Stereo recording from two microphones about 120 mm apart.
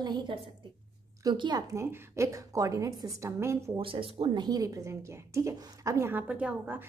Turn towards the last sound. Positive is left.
turn(degrees=-15)  # may be behind; listen again after turning